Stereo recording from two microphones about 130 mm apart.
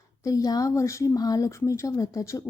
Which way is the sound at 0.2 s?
25° left (ahead or behind).